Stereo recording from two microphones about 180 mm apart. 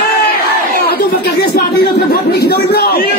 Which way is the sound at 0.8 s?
60° left (ahead or behind).